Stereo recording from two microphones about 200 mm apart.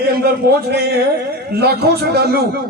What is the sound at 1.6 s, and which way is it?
Speech, 55° right (ahead or behind).